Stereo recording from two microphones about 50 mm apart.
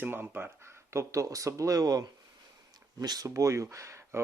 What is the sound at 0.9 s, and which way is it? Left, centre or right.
Speech, right.